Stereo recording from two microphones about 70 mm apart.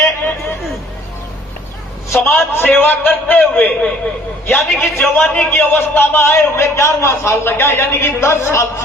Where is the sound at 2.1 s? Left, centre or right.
Left.